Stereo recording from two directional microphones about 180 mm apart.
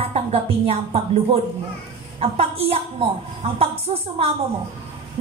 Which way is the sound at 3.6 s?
30° right (ahead or behind).